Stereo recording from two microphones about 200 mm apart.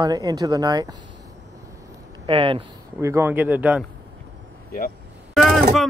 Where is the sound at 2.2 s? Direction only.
25° right (ahead or behind).